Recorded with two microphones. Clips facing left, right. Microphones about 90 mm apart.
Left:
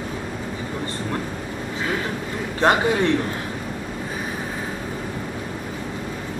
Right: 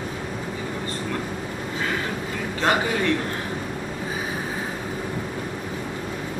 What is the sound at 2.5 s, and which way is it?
Speech, 30° left (ahead or behind).